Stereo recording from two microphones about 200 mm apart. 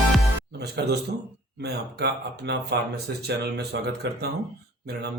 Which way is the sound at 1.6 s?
55° right (ahead or behind).